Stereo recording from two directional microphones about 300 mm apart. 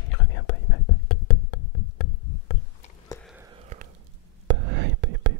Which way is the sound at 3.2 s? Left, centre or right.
Centre.